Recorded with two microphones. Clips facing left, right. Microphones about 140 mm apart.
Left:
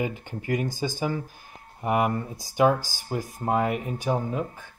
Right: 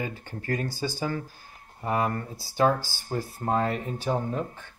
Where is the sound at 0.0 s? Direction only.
15° left (ahead or behind).